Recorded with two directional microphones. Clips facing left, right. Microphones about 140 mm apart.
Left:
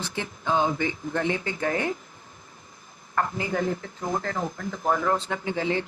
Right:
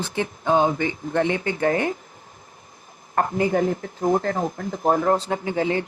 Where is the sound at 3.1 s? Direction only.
40° right (ahead or behind).